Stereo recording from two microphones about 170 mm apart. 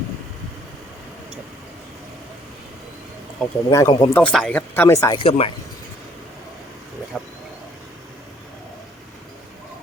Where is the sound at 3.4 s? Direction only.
20° left (ahead or behind).